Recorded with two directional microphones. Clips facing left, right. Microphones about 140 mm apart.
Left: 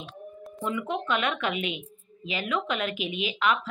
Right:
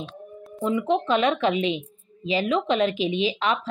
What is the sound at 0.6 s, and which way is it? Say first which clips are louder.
Speech: right 7 dB; 25° right (ahead or behind).